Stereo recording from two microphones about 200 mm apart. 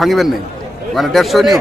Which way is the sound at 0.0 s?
Centre (ahead or behind).